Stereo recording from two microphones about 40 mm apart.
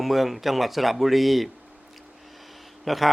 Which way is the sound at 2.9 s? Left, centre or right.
Centre.